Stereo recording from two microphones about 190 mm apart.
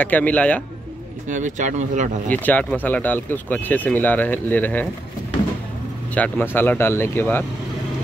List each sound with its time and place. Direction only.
0.0 s speech: 10° left (ahead or behind)
1.3 s speech: 40° right (ahead or behind)
2.4 s speech: 10° left (ahead or behind)
6.1 s speech: 10° left (ahead or behind)